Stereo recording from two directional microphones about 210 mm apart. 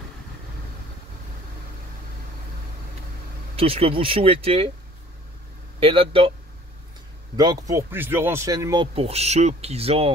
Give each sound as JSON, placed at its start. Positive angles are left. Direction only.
{"t": 3.5, "sound": "speech", "side_deg": -25}
{"t": 5.8, "sound": "speech", "side_deg": -25}
{"t": 7.3, "sound": "speech", "side_deg": -20}